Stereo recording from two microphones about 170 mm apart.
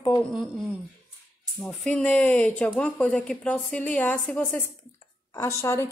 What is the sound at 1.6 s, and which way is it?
A woman's voice, 5° left (ahead or behind).